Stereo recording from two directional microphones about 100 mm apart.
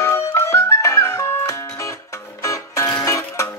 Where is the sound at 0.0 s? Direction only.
30° left (ahead or behind).